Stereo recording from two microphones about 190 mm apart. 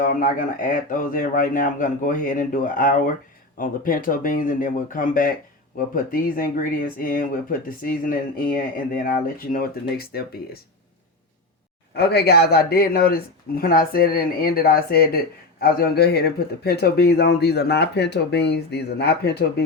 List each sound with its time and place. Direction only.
0.0 s speech: 45° left (ahead or behind)
11.9 s speech: 55° left (ahead or behind)